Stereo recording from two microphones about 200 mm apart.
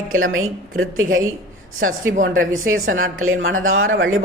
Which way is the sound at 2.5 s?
85° right.